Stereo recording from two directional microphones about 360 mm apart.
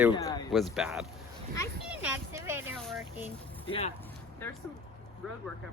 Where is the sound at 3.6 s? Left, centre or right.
Centre.